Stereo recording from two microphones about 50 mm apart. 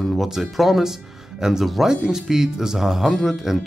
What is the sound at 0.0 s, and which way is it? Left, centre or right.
Music, centre.